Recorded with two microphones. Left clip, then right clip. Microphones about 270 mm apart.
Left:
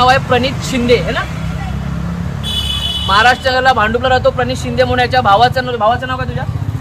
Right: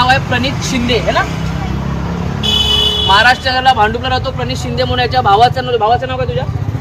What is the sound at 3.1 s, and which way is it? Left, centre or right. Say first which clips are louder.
Speech: left 1 dB; centre.